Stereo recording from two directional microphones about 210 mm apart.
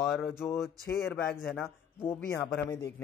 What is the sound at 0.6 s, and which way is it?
A man's voice, centre (ahead or behind).